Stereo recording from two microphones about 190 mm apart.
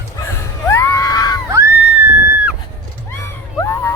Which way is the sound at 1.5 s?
15° right (ahead or behind).